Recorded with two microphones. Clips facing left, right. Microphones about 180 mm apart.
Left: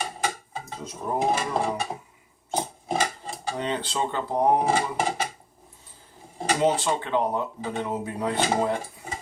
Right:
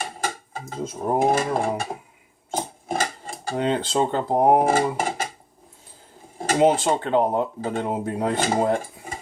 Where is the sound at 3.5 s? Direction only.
50° right (ahead or behind).